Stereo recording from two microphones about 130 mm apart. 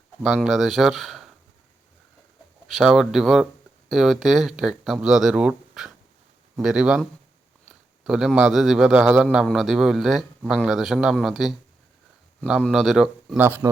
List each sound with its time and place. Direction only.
0.2 s a man's voice: centre (ahead or behind)
2.6 s a man's voice: centre (ahead or behind)
12.6 s a man's voice: centre (ahead or behind)